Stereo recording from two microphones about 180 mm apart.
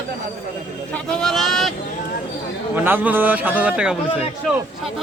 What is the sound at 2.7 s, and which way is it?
A man's voice, 10° right (ahead or behind).